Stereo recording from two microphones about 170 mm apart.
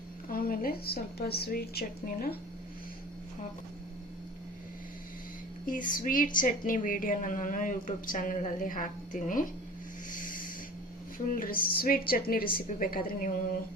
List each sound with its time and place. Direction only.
0.3 s a woman's voice: 60° left (ahead or behind)
5.6 s a woman's voice: 50° left (ahead or behind)
10.1 s snake: 50° left (ahead or behind)
11.3 s a woman's voice: 55° left (ahead or behind)